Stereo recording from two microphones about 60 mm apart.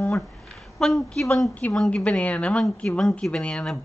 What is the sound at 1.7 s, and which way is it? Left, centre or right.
Speech, centre.